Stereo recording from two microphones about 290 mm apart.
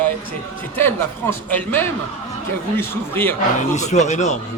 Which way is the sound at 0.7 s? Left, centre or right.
Centre.